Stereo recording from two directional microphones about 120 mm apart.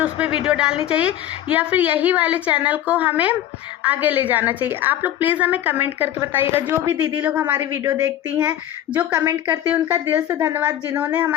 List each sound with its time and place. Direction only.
0.4 s a woman's voice: 5° right (ahead or behind)
7.6 s a woman's voice: 25° right (ahead or behind)
8.4 s speech: 10° right (ahead or behind)